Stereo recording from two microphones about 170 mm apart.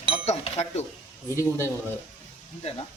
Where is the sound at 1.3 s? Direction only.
15° left (ahead or behind).